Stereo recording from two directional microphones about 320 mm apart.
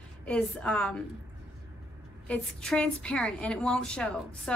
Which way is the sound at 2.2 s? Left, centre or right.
Centre.